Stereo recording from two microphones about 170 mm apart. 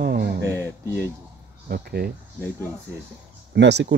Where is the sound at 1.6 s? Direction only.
65° right (ahead or behind).